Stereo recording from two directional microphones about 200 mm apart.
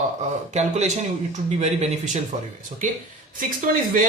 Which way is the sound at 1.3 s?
35° right (ahead or behind).